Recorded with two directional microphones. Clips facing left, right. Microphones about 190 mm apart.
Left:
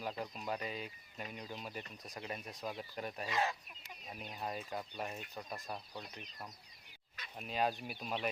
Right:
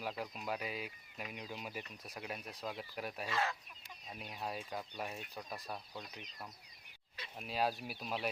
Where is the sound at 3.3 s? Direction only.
15° left (ahead or behind).